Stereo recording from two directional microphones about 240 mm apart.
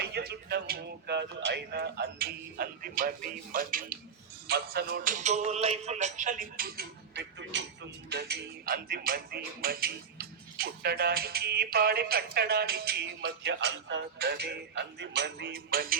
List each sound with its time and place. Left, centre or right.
0.0 s speech: right
4.4 s music: right